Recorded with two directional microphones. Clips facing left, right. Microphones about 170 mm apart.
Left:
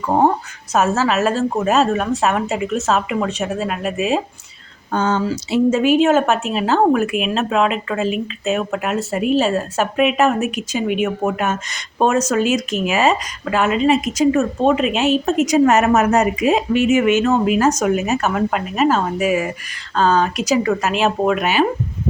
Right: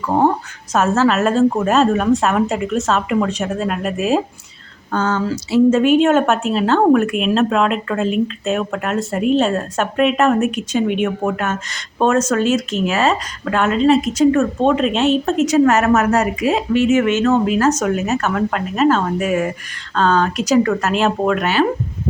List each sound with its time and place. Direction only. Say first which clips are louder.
0.7 s speech: right 2 dB; 5° left (ahead or behind)
4.9 s speech: even; 15° left (ahead or behind)
5.8 s speech: right 1 dB; 5° left (ahead or behind)